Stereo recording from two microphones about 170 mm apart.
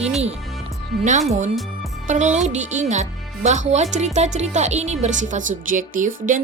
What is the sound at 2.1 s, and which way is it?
A woman's voice, 45° right (ahead or behind).